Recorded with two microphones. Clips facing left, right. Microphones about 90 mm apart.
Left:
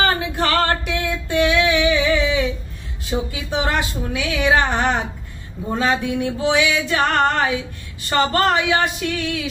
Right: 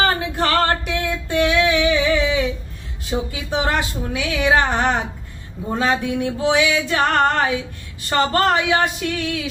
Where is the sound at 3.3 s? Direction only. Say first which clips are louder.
Right 2 dB; 40° right (ahead or behind).